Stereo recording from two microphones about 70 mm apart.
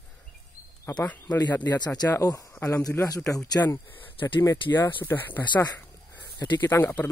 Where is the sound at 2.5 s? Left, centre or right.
Left.